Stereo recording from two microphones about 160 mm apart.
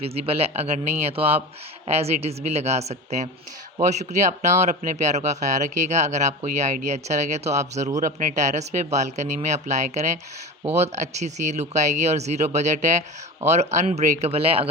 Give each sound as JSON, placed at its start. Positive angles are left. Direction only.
{"t": 0.0, "sound": "speech", "side_deg": -40}